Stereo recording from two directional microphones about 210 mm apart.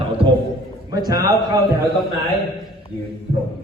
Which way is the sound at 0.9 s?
20° right (ahead or behind).